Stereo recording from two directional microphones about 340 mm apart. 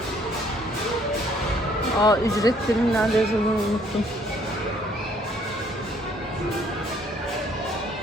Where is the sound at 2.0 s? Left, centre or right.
Centre.